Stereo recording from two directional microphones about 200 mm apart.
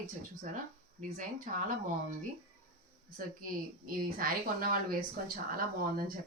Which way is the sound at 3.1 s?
45° right (ahead or behind).